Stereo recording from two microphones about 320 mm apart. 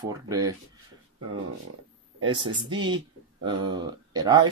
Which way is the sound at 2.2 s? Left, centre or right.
Centre.